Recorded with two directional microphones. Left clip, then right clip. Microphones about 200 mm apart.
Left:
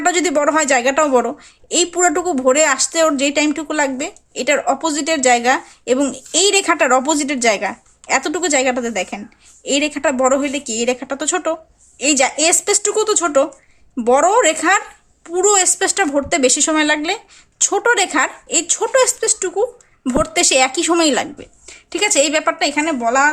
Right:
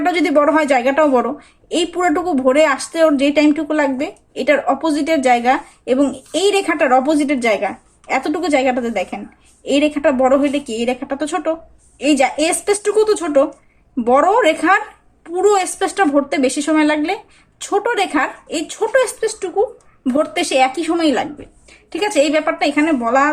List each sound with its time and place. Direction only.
0.0 s a woman's voice: 25° left (ahead or behind)